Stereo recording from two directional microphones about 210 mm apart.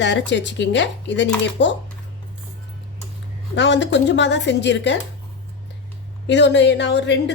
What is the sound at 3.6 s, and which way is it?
A woman's voice, 60° left (ahead or behind).